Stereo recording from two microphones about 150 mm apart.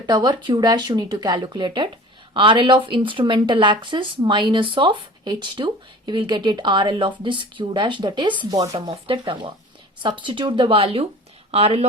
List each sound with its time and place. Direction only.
0.0 s speech: 30° right (ahead or behind)
8.9 s speech: 35° right (ahead or behind)